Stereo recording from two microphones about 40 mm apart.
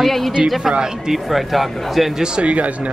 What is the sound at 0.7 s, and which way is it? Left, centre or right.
Speech, centre.